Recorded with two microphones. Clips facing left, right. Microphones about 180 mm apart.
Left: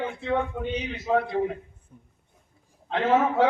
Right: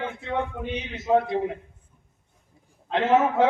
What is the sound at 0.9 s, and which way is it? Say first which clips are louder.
Speech: right 3 dB; 20° right (ahead or behind).